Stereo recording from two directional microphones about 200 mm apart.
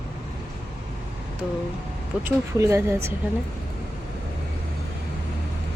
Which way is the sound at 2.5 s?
15° right (ahead or behind).